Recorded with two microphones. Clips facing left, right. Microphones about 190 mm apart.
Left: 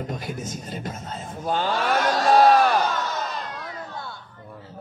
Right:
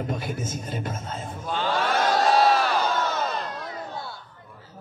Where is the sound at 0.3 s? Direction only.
45° right (ahead or behind).